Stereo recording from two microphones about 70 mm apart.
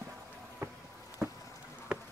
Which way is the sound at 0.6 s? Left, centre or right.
Right.